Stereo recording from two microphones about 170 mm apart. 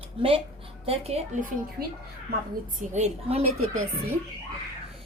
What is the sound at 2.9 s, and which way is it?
Speech, 40° right (ahead or behind).